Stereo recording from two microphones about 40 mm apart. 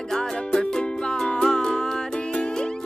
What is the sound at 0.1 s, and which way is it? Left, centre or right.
Music, centre.